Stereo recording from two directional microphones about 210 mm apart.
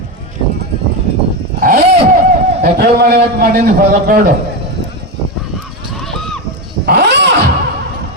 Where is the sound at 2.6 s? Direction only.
50° right (ahead or behind).